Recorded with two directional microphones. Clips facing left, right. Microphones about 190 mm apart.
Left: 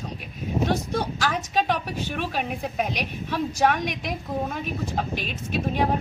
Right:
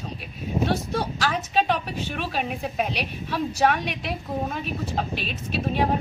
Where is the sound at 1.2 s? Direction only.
10° left (ahead or behind).